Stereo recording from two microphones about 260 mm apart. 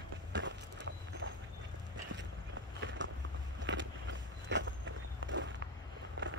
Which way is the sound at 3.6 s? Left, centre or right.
Right.